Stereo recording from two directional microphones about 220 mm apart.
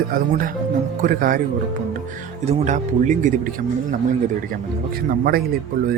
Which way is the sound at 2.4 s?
35° right (ahead or behind).